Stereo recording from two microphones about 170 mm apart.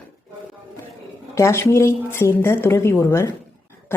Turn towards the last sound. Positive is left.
turn(degrees=15)  # may be behind; listen again after turning